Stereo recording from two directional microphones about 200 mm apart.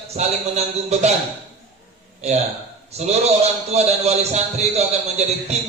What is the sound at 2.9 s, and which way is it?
A man's voice, 35° right (ahead or behind).